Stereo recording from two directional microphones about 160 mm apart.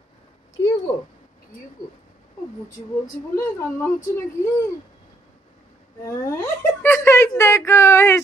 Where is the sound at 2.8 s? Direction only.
45° left (ahead or behind).